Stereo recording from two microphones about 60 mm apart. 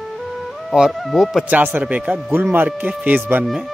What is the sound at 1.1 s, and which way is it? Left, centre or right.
Speech, centre.